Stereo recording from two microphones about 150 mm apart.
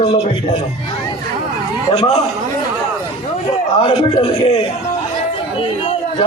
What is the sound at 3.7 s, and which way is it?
Speech, 40° left (ahead or behind).